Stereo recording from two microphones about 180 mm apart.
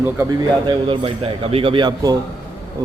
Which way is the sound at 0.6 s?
30° right (ahead or behind).